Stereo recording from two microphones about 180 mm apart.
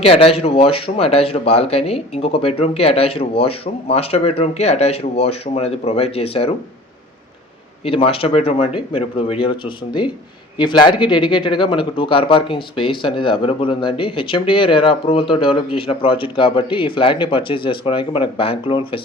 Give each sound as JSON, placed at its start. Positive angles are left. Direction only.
{"t": 0.0, "sound": "speech", "side_deg": 30}
{"t": 7.9, "sound": "speech", "side_deg": 30}